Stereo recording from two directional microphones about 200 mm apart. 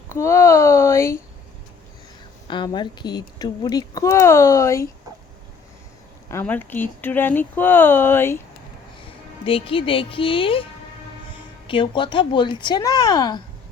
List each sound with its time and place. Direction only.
0.1 s a sound: 15° left (ahead or behind)
2.5 s speech: 25° left (ahead or behind)
6.2 s speech: 10° left (ahead or behind)
9.0 s speech: 25° left (ahead or behind)
11.7 s speech: 25° left (ahead or behind)